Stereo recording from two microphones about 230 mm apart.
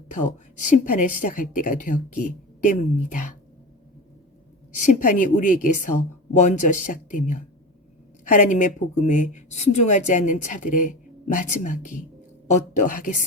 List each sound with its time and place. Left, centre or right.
0.1 s a woman's voice: left
4.7 s a woman's voice: left